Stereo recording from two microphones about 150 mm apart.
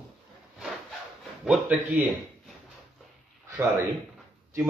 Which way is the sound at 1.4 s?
10° right (ahead or behind).